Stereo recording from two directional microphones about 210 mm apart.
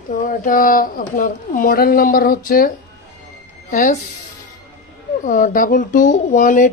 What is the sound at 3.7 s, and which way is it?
Speech, 40° left (ahead or behind).